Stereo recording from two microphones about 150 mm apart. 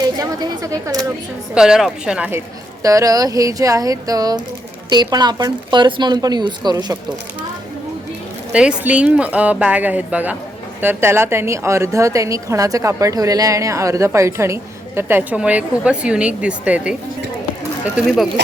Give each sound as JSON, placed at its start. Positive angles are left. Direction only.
{"t": 0.0, "sound": "a woman's voice", "side_deg": -25}
{"t": 1.5, "sound": "speech", "side_deg": -5}
{"t": 2.8, "sound": "a woman's voice", "side_deg": -20}
{"t": 8.5, "sound": "a woman's voice", "side_deg": -10}
{"t": 17.9, "sound": "speech", "side_deg": 0}